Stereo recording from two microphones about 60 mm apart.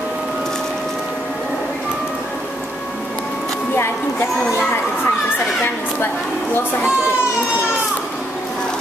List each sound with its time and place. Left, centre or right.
4.5 s speech: left